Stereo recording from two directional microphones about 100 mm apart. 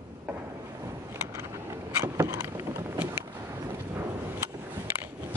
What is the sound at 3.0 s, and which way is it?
Vehicle, 20° right (ahead or behind).